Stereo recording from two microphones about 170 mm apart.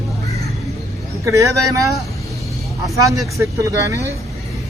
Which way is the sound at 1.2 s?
20° right (ahead or behind).